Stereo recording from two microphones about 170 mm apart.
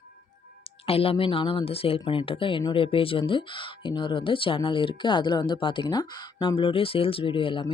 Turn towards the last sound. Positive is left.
turn(degrees=30)  # may be behind; listen again after turning